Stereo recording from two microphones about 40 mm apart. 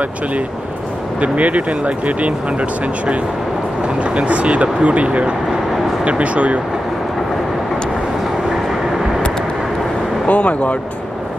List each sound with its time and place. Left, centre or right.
1.2 s speech: right
3.8 s speech: right
10.2 s speech: left